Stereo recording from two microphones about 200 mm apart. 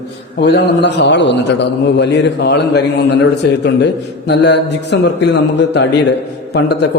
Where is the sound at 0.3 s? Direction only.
55° left (ahead or behind).